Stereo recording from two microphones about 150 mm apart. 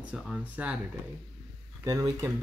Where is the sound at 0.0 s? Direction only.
5° right (ahead or behind).